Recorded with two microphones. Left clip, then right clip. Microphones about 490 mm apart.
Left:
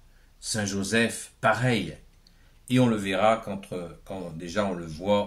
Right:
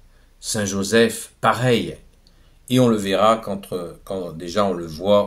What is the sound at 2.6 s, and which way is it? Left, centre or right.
Speech, left.